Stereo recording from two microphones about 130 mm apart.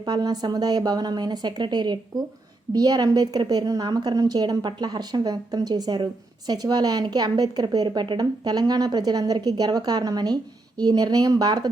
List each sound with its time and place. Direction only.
0.0 s a woman's voice: 30° right (ahead or behind)